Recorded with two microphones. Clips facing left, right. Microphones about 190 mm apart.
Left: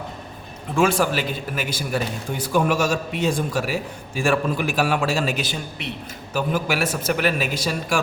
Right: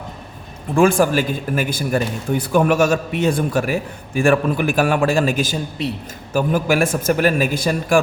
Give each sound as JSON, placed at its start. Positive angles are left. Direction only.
{"t": 0.8, "sound": "a man's voice", "side_deg": -50}
{"t": 2.4, "sound": "a man's voice", "side_deg": -60}